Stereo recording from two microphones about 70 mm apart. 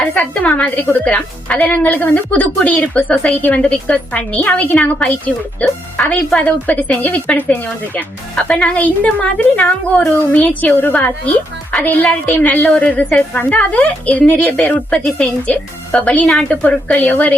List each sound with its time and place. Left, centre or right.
0.1 s a woman's voice: centre
16.6 s a woman's voice: left